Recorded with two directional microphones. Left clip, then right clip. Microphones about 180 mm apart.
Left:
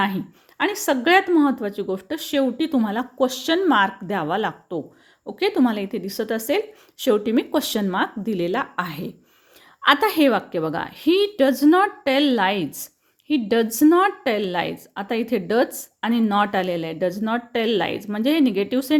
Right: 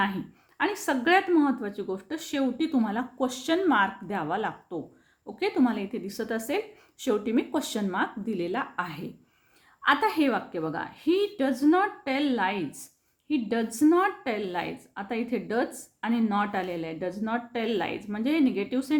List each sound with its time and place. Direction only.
0.0 s a woman's voice: 35° left (ahead or behind)